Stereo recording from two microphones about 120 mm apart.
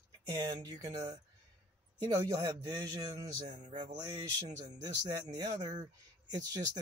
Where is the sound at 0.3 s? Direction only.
30° right (ahead or behind).